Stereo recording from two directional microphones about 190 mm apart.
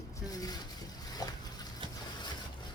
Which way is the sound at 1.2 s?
20° left (ahead or behind).